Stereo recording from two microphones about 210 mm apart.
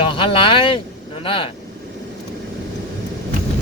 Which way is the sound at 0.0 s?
25° left (ahead or behind).